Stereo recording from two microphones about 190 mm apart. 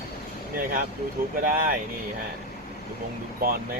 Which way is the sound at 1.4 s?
50° right (ahead or behind).